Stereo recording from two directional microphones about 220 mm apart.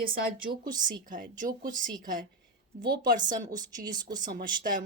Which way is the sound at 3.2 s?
35° right (ahead or behind).